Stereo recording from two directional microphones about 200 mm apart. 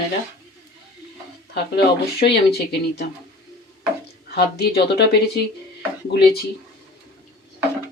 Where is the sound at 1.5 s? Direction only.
55° left (ahead or behind).